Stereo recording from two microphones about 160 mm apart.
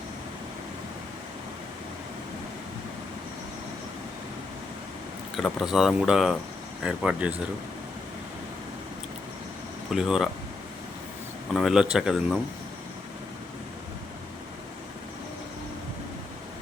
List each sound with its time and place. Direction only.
5.4 s speech: centre (ahead or behind)
9.9 s speech: centre (ahead or behind)
11.5 s speech: 5° right (ahead or behind)